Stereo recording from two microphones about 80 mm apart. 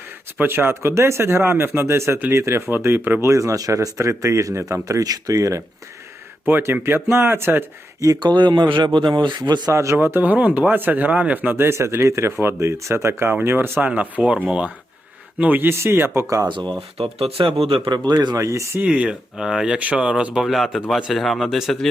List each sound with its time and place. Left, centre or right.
0.3 s speech: right
3.2 s speech: right
6.5 s speech: right
8.2 s speech: right
9.5 s speech: right
9.7 s speech: right
10.0 s speech: right
11.5 s speech: right
17.4 s a man's voice: right
18.3 s speech: right
18.8 s speech: centre